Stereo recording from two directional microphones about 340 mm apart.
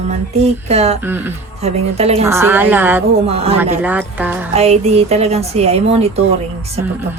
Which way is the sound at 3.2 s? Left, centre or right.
Centre.